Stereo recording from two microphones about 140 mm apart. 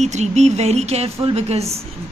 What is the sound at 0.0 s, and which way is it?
A woman's voice, 55° right (ahead or behind).